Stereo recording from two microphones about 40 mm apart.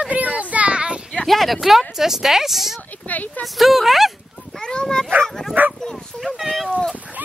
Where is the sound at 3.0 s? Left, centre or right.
Left.